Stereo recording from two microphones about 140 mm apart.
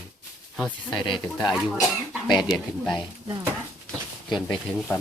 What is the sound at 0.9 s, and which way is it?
Speech, 35° left (ahead or behind).